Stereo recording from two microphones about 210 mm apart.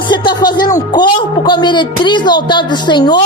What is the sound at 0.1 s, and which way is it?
Speech, 20° left (ahead or behind).